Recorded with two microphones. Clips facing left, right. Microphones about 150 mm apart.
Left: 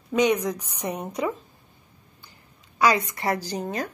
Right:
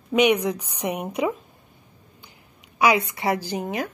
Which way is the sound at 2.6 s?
10° right (ahead or behind).